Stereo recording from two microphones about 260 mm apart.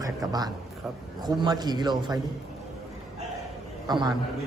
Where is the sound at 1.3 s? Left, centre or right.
Centre.